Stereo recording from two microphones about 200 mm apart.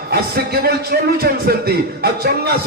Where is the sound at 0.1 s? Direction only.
50° right (ahead or behind).